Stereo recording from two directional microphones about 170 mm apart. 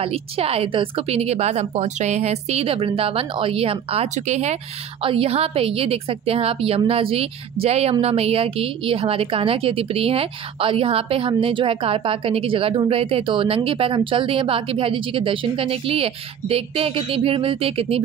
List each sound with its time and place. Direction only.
0.0 s a woman's voice: 35° right (ahead or behind)